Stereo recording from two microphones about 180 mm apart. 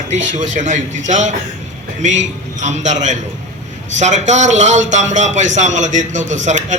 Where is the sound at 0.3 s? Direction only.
40° right (ahead or behind).